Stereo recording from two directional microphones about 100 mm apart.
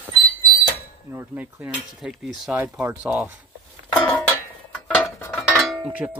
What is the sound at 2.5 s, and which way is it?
Speech, 15° right (ahead or behind).